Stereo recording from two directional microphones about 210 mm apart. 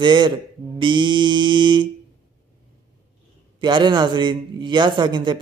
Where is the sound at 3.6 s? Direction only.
20° right (ahead or behind).